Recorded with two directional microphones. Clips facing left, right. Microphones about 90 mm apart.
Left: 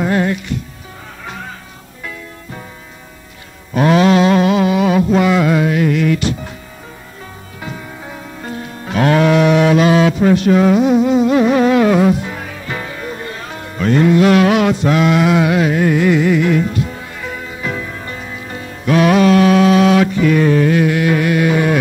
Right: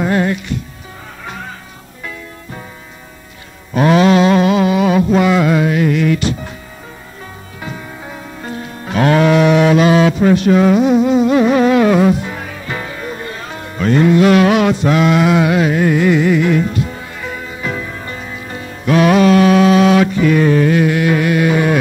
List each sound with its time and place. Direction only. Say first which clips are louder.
0.0 s speech: right 1 dB; 25° right (ahead or behind)
3.7 s mantra: right 1 dB; 25° right (ahead or behind)
8.9 s livestock: right 1 dB; 25° right (ahead or behind)
10.6 s insect: right 1 dB; 10° right (ahead or behind)
10.9 s music: right 1 dB; 20° right (ahead or behind)
18.9 s mantra: right 1 dB; 25° right (ahead or behind)